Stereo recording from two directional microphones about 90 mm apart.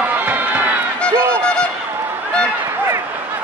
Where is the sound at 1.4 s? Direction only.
10° left (ahead or behind).